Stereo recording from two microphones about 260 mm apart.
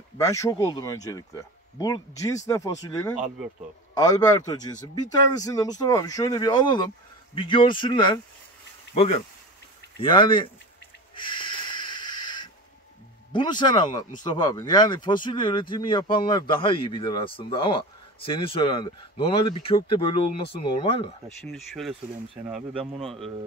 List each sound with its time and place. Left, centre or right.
0.2 s a man's voice: centre
11.1 s snort: centre
13.3 s a man's voice: centre
21.4 s speech: centre